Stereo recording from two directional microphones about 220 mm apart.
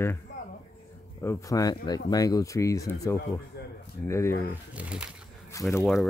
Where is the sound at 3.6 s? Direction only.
50° left (ahead or behind).